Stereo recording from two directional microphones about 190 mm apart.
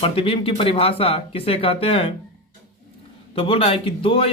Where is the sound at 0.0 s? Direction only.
30° left (ahead or behind).